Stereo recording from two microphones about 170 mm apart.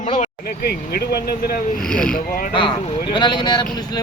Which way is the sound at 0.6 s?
65° left (ahead or behind).